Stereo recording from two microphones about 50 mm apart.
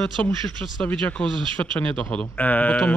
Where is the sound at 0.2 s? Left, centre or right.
Left.